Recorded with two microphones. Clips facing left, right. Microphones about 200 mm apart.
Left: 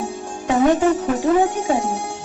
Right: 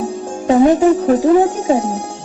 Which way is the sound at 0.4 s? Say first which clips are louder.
Right 6 dB; 40° right (ahead or behind).